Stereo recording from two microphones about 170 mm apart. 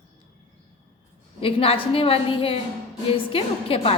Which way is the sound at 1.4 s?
35° left (ahead or behind).